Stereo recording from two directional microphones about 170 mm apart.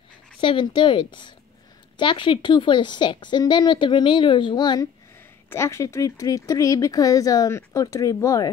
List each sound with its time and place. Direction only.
0.4 s speech: 30° left (ahead or behind)